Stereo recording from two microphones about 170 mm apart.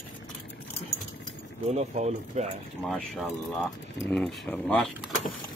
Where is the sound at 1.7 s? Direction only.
40° right (ahead or behind).